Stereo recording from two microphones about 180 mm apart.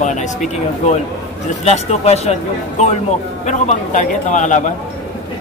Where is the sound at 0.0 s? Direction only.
40° left (ahead or behind).